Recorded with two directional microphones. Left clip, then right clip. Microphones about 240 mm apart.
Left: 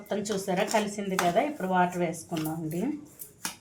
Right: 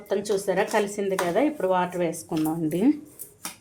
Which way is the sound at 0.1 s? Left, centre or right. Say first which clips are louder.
Right 6 dB; right.